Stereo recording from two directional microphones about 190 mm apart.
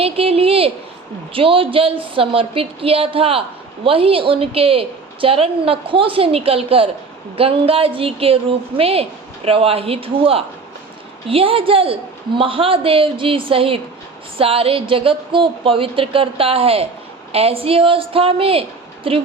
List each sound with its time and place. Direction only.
0.0 s a woman's voice: 30° right (ahead or behind)